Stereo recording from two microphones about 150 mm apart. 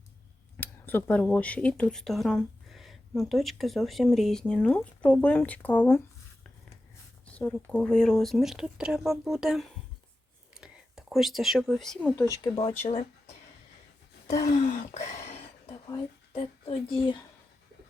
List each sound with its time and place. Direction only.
0.5 s speech: 15° left (ahead or behind)
7.3 s speech: 10° left (ahead or behind)
12.3 s speech: 30° left (ahead or behind)
12.9 s speech: 45° left (ahead or behind)
14.5 s a sound: 50° left (ahead or behind)
16.4 s speech: 35° left (ahead or behind)